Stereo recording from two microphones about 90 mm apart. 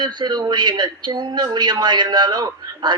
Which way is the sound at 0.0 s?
50° right (ahead or behind).